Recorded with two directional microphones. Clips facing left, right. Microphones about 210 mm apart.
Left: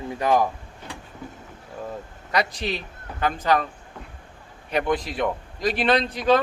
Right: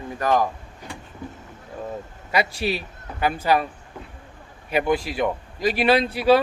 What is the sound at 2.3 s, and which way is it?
Speech, 5° right (ahead or behind).